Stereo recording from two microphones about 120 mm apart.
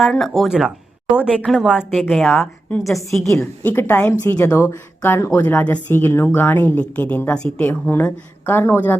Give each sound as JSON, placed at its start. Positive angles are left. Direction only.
{"t": 0.0, "sound": "a woman's voice", "side_deg": 0}
{"t": 2.8, "sound": "speech", "side_deg": 0}
{"t": 3.4, "sound": "speech", "side_deg": 15}